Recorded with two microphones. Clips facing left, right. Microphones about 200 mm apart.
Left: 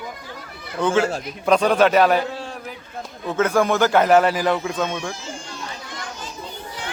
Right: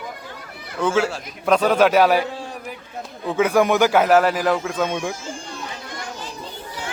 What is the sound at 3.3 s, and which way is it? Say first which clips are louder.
A man's voice: right 2 dB; 15° right (ahead or behind).